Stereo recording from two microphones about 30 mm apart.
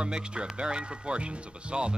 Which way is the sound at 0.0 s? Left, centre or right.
Right.